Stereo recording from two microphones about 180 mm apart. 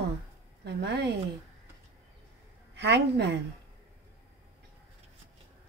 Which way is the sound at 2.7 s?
75° right (ahead or behind).